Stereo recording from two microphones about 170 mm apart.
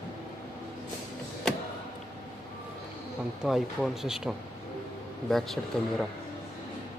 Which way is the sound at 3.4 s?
5° right (ahead or behind).